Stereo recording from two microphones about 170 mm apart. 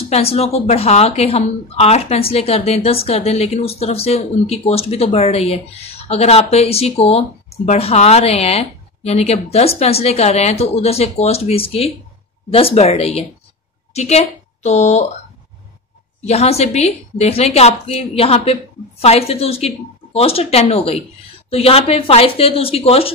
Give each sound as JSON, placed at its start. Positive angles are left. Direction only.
{"t": 0.1, "sound": "a woman's voice", "side_deg": 35}
{"t": 16.3, "sound": "speech", "side_deg": 40}